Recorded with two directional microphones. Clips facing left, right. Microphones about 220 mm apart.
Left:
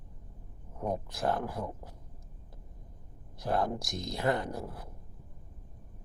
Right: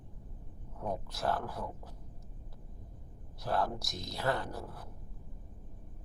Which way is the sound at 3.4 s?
20° left (ahead or behind).